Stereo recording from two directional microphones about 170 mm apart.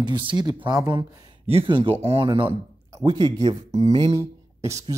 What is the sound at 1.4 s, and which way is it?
Speech, 35° right (ahead or behind).